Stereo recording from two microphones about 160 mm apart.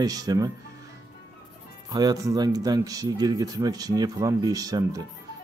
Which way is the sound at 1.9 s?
25° right (ahead or behind).